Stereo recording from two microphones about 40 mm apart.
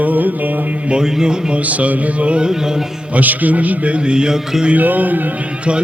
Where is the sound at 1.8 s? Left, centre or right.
Right.